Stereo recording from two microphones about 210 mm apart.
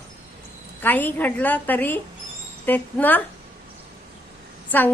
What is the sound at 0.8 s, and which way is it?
Speech, 10° left (ahead or behind).